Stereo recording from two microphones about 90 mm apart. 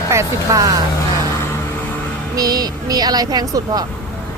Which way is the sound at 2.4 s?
45° right (ahead or behind).